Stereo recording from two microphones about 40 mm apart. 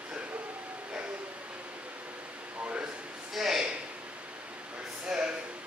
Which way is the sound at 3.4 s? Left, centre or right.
Centre.